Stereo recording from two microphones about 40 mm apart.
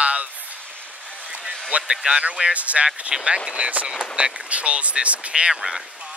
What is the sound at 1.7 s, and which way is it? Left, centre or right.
Speech, right.